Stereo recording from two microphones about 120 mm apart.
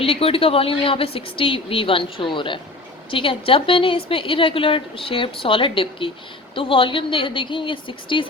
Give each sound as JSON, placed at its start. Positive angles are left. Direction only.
{"t": 0.0, "sound": "a woman's voice", "side_deg": 50}